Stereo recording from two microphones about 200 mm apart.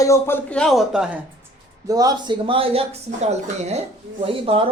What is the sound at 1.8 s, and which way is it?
Speech, 20° right (ahead or behind).